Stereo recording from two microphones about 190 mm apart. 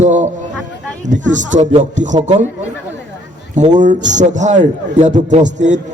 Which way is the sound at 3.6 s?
40° right (ahead or behind).